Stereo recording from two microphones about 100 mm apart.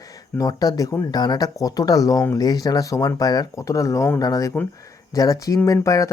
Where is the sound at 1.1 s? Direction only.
45° left (ahead or behind).